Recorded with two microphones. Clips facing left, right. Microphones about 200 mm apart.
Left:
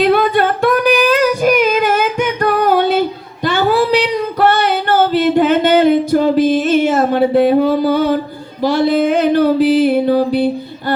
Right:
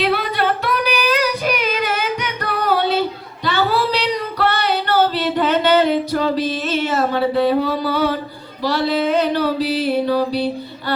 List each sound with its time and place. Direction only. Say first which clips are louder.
0.0 s singing: left 7 dB; 50° left (ahead or behind)
3.4 s female singing: left 5 dB; 50° left (ahead or behind)
8.6 s music: left 6 dB; 50° left (ahead or behind)